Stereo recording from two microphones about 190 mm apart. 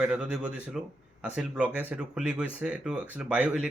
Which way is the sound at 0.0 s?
5° right (ahead or behind).